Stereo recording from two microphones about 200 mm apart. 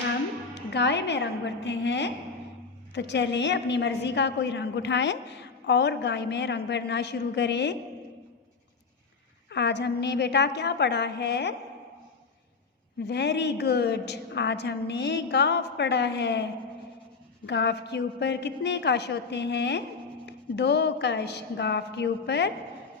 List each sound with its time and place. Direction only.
0.5 s a woman's voice: 60° left (ahead or behind)
9.5 s a woman's voice: 60° left (ahead or behind)
13.0 s a woman's voice: 60° left (ahead or behind)
17.4 s a woman's voice: 60° left (ahead or behind)